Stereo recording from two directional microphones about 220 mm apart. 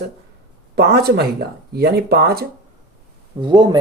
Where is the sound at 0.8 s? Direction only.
45° right (ahead or behind).